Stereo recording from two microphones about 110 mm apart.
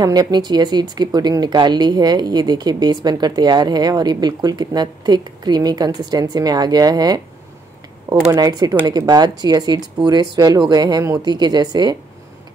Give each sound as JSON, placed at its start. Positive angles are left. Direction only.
{"t": 0.0, "sound": "speech", "side_deg": -35}
{"t": 8.3, "sound": "speech", "side_deg": -35}